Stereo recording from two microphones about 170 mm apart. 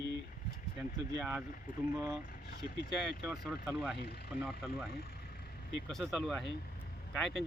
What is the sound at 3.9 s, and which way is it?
Speech, 75° left (ahead or behind).